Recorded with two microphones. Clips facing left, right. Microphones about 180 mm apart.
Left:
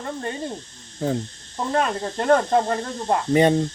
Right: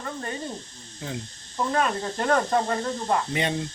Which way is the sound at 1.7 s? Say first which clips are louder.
Left 4 dB; 30° left (ahead or behind).